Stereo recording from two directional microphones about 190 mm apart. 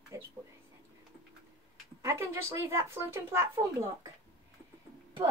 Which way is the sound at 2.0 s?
15° right (ahead or behind).